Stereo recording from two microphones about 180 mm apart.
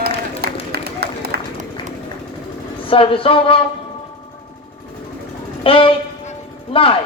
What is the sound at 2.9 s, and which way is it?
Speech, 30° left (ahead or behind).